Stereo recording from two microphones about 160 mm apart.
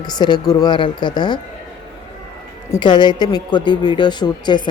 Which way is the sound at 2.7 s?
30° left (ahead or behind).